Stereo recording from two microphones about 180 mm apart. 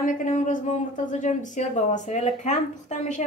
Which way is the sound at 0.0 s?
45° left (ahead or behind).